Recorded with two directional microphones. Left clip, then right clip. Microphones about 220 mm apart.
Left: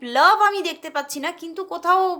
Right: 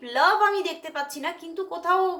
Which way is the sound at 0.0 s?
50° left (ahead or behind).